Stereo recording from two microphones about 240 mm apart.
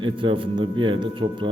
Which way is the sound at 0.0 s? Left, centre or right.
Right.